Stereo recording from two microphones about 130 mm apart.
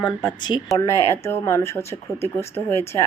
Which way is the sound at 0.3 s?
35° left (ahead or behind).